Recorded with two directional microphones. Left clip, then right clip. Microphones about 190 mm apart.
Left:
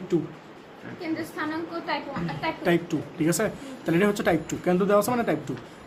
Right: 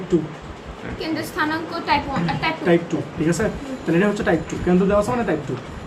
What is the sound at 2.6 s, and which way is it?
Speech, 60° left (ahead or behind).